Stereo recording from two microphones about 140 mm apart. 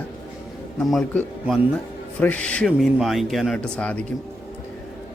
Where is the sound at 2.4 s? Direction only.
5° left (ahead or behind).